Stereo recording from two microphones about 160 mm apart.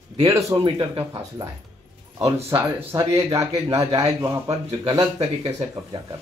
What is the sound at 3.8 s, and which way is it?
Speech, 30° right (ahead or behind).